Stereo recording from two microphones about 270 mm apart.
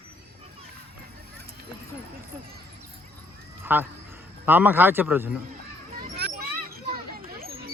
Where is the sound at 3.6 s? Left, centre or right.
Centre.